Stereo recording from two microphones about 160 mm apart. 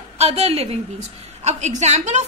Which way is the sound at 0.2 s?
40° right (ahead or behind).